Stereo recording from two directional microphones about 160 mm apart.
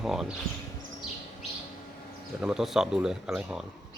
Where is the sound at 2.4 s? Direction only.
Centre (ahead or behind).